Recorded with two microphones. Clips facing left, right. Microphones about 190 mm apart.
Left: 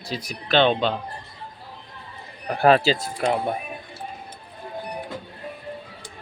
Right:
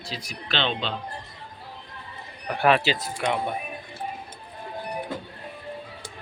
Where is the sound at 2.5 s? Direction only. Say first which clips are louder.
Left 4 dB; 35° left (ahead or behind).